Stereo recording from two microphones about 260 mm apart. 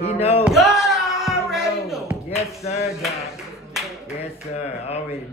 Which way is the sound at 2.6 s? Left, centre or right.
Left.